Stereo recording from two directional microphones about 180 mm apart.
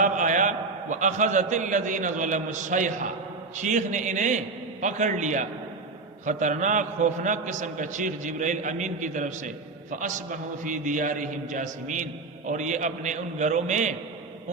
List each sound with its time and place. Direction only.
0.0 s a man's voice: 45° right (ahead or behind)